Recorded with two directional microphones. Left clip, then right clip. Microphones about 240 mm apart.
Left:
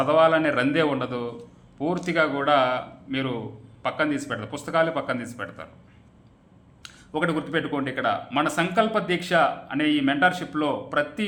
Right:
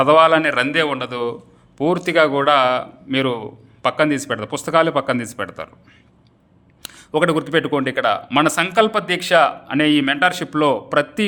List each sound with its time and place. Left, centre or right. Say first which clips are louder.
0.0 s a man's voice: right 7 dB; right
6.8 s a man's voice: right 9 dB; right